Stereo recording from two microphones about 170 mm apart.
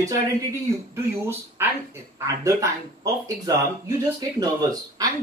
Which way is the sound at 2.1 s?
20° right (ahead or behind).